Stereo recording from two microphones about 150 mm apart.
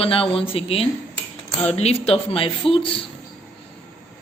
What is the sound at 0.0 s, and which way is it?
Speech, 40° left (ahead or behind).